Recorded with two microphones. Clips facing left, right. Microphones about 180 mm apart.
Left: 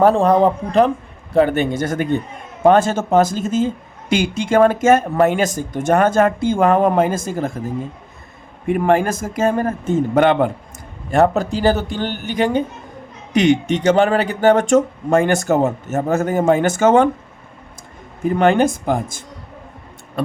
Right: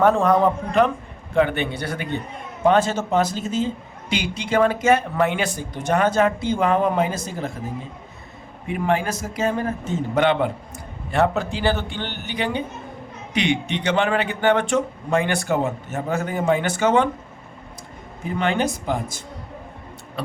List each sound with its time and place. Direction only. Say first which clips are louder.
0.0 s a man's voice: left 4 dB; 35° left (ahead or behind)
8.6 s a man's voice: left 7 dB; 50° left (ahead or behind)
18.3 s speech: left 8 dB; 50° left (ahead or behind)